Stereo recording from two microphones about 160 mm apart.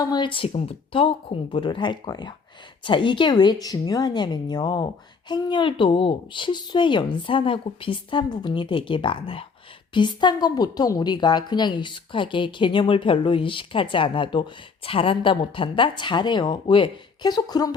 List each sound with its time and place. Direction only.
0.0 s a woman's voice: 25° left (ahead or behind)